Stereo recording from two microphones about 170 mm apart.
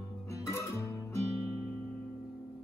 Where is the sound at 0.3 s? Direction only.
15° left (ahead or behind).